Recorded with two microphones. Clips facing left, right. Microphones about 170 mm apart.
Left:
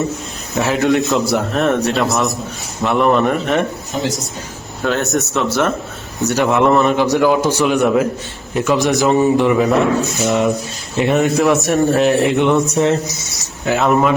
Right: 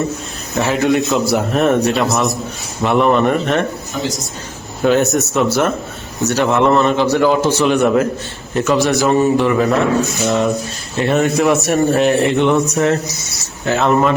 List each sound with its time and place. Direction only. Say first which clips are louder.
0.5 s a man's voice: even; centre (ahead or behind)
4.8 s a man's voice: right 4 dB; 5° right (ahead or behind); by 9.6 s 15° left (ahead or behind)
9.6 s a man's voice: even; centre (ahead or behind)
12.7 s speech: even; 20° left (ahead or behind)
13.7 s a man's voice: even; centre (ahead or behind)